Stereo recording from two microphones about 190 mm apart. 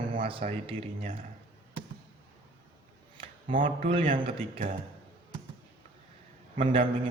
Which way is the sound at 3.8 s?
30° right (ahead or behind).